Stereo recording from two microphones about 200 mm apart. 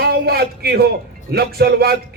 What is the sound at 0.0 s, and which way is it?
A man's voice, 50° right (ahead or behind).